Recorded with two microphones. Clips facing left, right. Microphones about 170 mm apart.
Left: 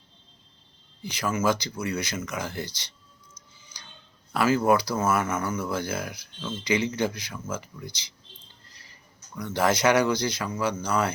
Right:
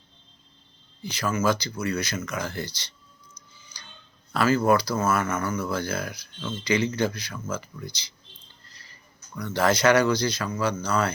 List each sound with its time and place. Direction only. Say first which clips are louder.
1.0 s speech: right 1 dB; 15° left (ahead or behind)
3.7 s dog: even; 15° left (ahead or behind)
4.3 s speech: right 1 dB; 15° left (ahead or behind)